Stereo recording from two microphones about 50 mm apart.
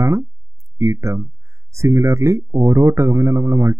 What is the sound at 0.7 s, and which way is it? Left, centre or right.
Speech, right.